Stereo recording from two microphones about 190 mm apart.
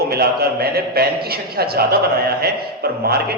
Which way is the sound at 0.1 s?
55° right (ahead or behind).